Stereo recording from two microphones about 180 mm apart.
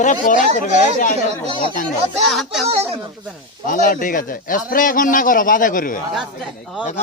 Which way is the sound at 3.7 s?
50° left (ahead or behind).